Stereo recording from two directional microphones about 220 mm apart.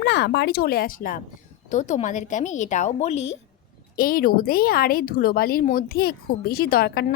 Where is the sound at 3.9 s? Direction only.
40° left (ahead or behind).